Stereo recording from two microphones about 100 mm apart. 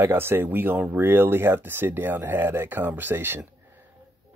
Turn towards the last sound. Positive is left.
turn(degrees=-20)  # may be behind; listen again after turning